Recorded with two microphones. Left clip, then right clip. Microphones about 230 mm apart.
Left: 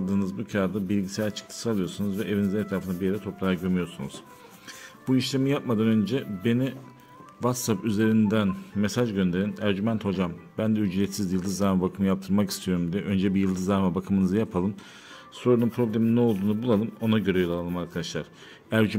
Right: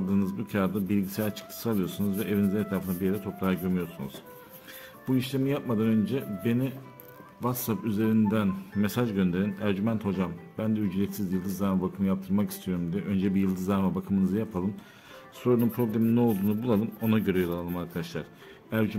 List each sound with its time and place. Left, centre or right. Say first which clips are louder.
0.1 s speech: left 1 dB; centre
5.0 s speech: left 3 dB; left
15.4 s speech: left 3 dB; centre